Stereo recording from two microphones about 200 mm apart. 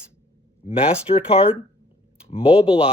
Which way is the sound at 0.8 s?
30° left (ahead or behind).